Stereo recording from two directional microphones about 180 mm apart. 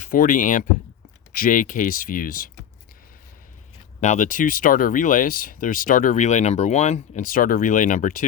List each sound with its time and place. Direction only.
0.0 s speech: 50° left (ahead or behind)
4.0 s speech: 45° left (ahead or behind)